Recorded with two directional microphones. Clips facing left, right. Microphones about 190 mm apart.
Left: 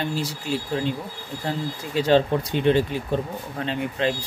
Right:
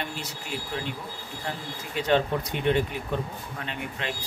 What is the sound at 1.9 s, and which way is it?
Speech, 30° left (ahead or behind).